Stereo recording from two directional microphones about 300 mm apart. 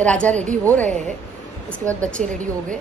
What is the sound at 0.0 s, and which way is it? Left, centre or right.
Speech, centre.